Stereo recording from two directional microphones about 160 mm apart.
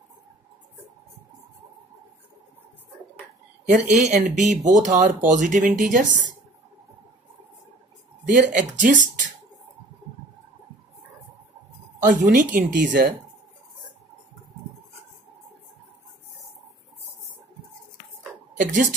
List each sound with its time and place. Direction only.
3.6 s speech: 50° right (ahead or behind)
8.3 s speech: 50° right (ahead or behind)
12.1 s speech: 60° right (ahead or behind)
18.6 s speech: 50° right (ahead or behind)